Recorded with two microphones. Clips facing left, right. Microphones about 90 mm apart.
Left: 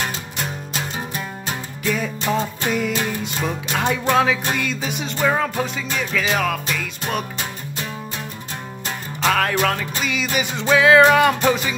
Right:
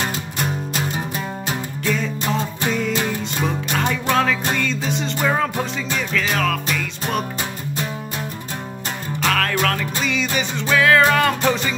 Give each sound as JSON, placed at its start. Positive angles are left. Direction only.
{"t": 1.9, "sound": "music", "side_deg": 5}
{"t": 9.2, "sound": "music", "side_deg": 10}
{"t": 10.5, "sound": "music", "side_deg": 20}